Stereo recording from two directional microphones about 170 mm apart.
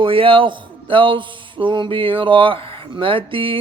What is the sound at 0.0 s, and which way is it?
A man's voice, 30° right (ahead or behind).